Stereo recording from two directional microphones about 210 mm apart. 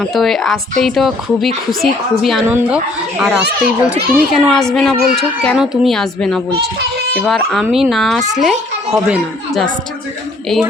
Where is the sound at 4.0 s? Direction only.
45° right (ahead or behind).